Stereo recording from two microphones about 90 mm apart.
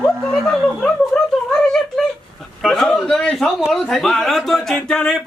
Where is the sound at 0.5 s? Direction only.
5° left (ahead or behind).